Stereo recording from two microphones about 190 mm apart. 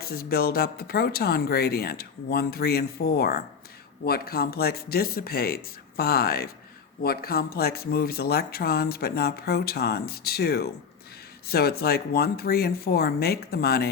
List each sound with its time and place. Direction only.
0.0 s speech: 55° left (ahead or behind)